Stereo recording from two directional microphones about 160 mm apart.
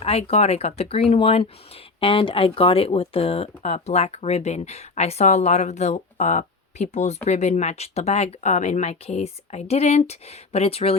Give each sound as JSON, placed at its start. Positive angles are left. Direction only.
{"t": 0.0, "sound": "speech", "side_deg": 40}